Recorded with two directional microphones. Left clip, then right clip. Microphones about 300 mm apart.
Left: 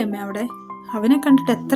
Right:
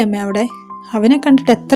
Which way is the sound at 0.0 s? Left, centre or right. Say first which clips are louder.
Right 9 dB; left.